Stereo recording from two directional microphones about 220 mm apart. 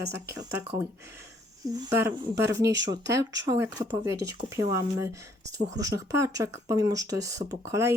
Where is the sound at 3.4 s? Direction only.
15° right (ahead or behind).